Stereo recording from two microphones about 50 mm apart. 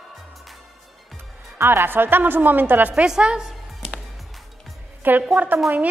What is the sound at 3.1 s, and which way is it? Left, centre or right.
Music, centre.